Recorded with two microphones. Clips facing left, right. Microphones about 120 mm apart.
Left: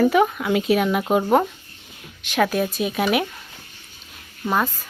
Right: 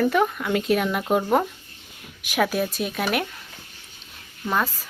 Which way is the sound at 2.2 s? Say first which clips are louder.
Left 2 dB; 5° right (ahead or behind).